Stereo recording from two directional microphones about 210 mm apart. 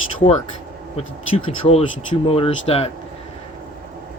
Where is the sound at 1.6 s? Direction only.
25° left (ahead or behind).